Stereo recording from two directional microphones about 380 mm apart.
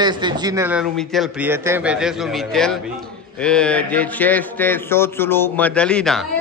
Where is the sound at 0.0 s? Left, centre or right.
Centre.